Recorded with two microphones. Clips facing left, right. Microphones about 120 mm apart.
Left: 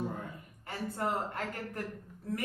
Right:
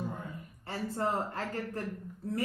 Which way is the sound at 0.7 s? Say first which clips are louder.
Right 2 dB; 30° right (ahead or behind).